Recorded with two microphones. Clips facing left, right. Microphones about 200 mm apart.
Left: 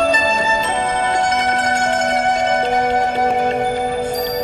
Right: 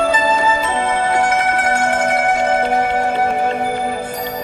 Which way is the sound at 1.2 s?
20° left (ahead or behind).